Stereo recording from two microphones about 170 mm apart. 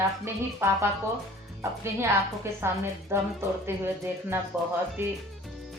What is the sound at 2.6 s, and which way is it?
Speech, 15° right (ahead or behind).